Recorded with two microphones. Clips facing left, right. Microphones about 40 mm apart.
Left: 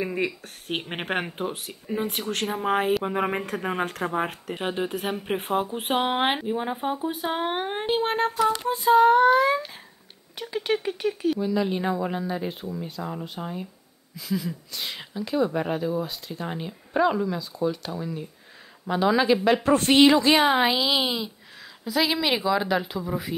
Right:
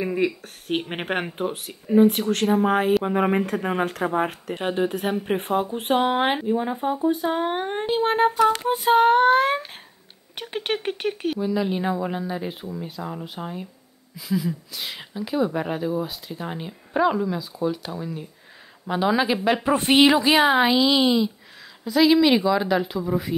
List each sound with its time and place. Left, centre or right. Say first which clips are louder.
0.0 s speech: right 4 dB; centre; by 7.6 s left
7.6 s speech: right 1 dB; centre
8.0 s speech: right 7 dB; centre
8.5 s a sound: even; right
10.3 s speech: left 1 dB; right
11.3 s a woman's voice: right 1 dB; centre